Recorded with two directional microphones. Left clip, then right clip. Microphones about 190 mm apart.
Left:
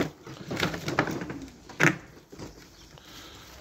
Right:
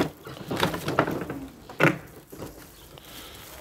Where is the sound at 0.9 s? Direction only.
50° left (ahead or behind).